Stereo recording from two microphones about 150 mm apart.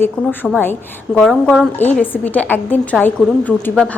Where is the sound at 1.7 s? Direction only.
10° left (ahead or behind).